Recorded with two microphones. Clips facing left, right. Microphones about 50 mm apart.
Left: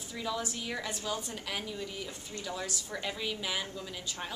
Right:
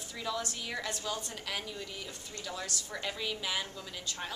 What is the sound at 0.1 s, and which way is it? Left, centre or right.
A woman's voice, centre.